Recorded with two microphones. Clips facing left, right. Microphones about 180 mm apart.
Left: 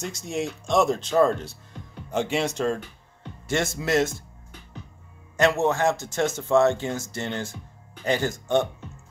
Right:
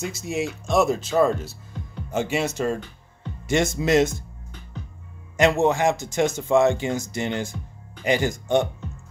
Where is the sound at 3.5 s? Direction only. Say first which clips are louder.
Right 4 dB; 15° right (ahead or behind).